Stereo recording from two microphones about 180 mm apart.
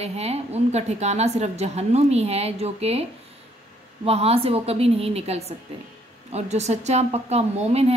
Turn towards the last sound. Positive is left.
turn(degrees=-35)  # may be behind; listen again after turning